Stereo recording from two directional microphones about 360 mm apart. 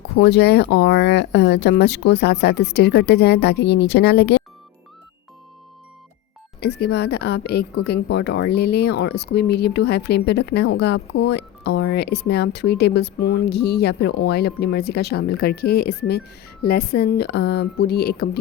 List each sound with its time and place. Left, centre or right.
0.2 s speech: left
6.6 s speech: left